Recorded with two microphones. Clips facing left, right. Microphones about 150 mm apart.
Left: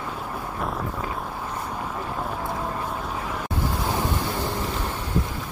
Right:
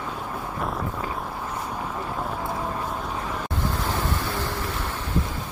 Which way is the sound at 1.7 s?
Centre (ahead or behind).